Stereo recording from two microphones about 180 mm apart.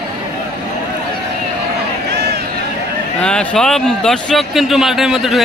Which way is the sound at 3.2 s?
5° left (ahead or behind).